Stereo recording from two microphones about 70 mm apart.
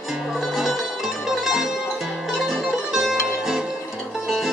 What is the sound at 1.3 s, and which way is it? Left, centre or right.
Music, centre.